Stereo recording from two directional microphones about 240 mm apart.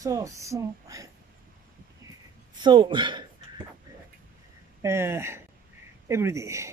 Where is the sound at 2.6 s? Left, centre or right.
Centre.